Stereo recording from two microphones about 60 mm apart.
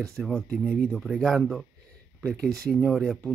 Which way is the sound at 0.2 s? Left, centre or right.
Centre.